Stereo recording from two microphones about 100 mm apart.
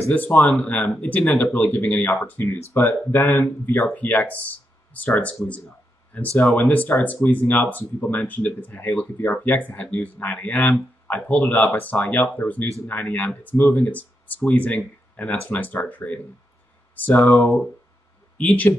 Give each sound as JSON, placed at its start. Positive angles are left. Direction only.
{"t": 0.1, "sound": "speech", "side_deg": 15}
{"t": 18.4, "sound": "speech", "side_deg": 15}